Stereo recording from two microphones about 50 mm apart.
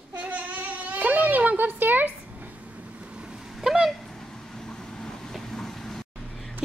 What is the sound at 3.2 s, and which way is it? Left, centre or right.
Vehicle, centre.